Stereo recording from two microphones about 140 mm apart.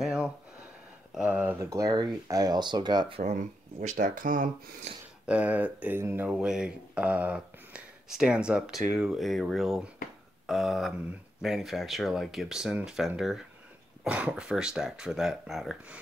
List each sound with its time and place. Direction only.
0.0 s a sound: 5° right (ahead or behind)
1.1 s speech: 10° right (ahead or behind); by 3.2 s 30° right (ahead or behind)
3.8 s speech: 65° right (ahead or behind)
5.2 s speech: 10° right (ahead or behind)
10.4 s a sound: centre (ahead or behind)
11.4 s speech: centre (ahead or behind)